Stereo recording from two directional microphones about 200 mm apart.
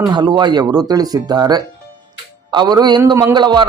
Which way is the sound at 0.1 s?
20° right (ahead or behind).